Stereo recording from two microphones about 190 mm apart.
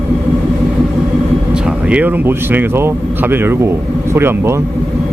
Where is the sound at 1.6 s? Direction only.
5° right (ahead or behind).